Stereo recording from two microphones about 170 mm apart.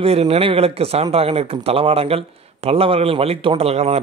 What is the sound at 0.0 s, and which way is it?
A man's voice, 35° right (ahead or behind).